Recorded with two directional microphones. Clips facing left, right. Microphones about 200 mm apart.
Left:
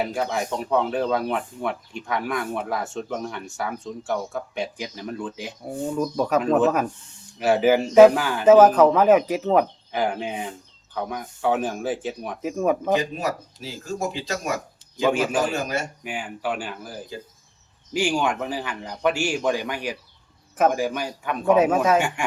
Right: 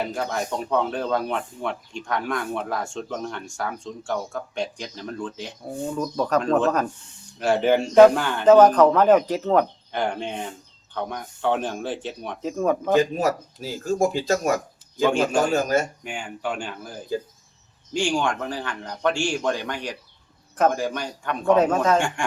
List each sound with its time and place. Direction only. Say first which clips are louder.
0.0 s a man's voice: left 2 dB; 5° left (ahead or behind)
13.0 s speech: right 6 dB; 45° right (ahead or behind)
16.0 s a man's voice: left 1 dB; 5° left (ahead or behind)